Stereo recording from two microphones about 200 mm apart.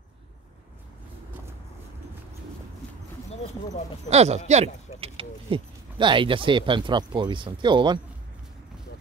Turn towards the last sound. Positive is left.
turn(degrees=-25)  # may be behind; listen again after turning